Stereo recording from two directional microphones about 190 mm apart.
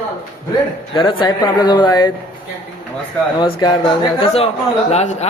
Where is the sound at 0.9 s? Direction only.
25° left (ahead or behind).